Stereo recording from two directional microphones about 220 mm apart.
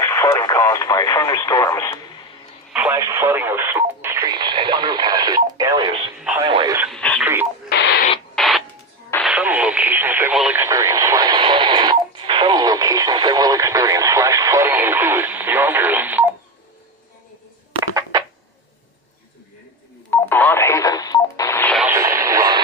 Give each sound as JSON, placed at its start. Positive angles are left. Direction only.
{"t": 0.0, "sound": "speech", "side_deg": 15}
{"t": 2.7, "sound": "speech", "side_deg": -10}
{"t": 6.8, "sound": "speech", "side_deg": 0}
{"t": 7.7, "sound": "radio", "side_deg": 50}
{"t": 8.4, "sound": "a sound", "side_deg": 0}
{"t": 9.2, "sound": "speech", "side_deg": -5}
{"t": 20.1, "sound": "radio", "side_deg": 10}
{"t": 21.8, "sound": "radio", "side_deg": -10}